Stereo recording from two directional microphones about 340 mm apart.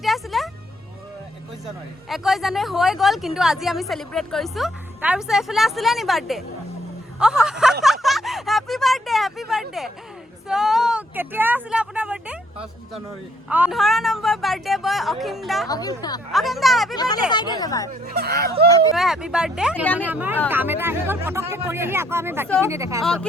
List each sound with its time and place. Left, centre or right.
0.0 s music: centre
2.0 s a woman's voice: centre
7.2 s a sound: centre
13.5 s a woman's voice: centre
15.6 s speech: centre
16.3 s a woman's voice: centre
16.9 s speech: centre
18.0 s speech: right
18.9 s a woman's voice: centre